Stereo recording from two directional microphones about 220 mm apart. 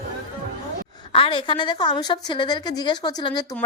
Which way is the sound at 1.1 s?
25° left (ahead or behind).